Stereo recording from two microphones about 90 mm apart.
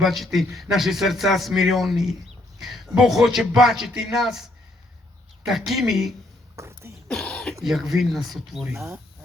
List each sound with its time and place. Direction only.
0.0 s speech: centre (ahead or behind)
6.6 s throat clearing: 30° right (ahead or behind)
7.1 s throat clearing: 10° left (ahead or behind)
7.6 s speech: centre (ahead or behind)